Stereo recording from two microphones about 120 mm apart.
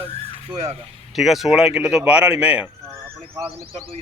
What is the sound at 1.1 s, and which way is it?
Speech, centre (ahead or behind).